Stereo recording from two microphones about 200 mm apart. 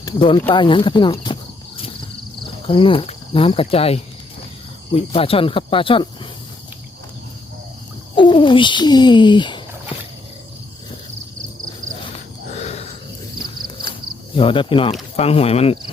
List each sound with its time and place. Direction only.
0.0 s speech: 25° left (ahead or behind)
0.5 s cricket: 25° left (ahead or behind)
8.1 s speech: 25° left (ahead or behind)
12.5 s cricket: 35° left (ahead or behind)
14.3 s cricket: 25° left (ahead or behind)